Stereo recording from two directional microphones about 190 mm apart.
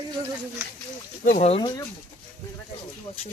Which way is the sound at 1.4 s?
30° left (ahead or behind).